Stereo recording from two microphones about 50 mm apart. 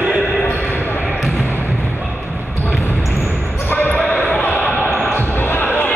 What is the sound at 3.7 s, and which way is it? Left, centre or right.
Basketball bounce, left.